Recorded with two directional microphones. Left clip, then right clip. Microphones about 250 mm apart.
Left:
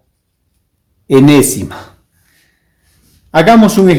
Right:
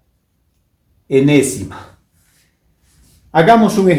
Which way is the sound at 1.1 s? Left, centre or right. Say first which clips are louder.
Left 5 dB; left.